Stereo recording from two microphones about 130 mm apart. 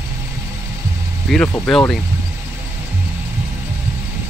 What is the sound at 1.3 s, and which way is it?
Speech, 5° left (ahead or behind).